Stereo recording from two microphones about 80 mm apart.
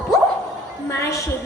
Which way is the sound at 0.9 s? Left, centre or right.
Left.